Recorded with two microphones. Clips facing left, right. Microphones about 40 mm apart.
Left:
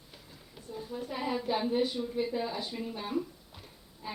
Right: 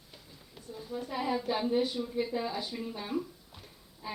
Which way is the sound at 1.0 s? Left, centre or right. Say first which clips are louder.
Right 2 dB; centre.